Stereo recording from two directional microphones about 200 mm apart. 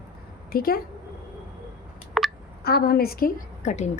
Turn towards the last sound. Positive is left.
turn(degrees=35)  # may be behind; listen again after turning